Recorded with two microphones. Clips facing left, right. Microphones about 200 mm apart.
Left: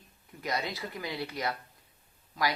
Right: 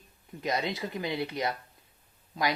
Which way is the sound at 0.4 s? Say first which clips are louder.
Right 3 dB; 20° right (ahead or behind).